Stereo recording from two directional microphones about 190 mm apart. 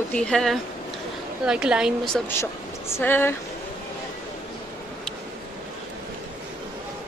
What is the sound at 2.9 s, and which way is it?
Speech, 10° left (ahead or behind).